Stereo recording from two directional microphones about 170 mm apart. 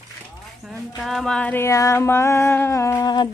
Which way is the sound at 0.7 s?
Centre (ahead or behind).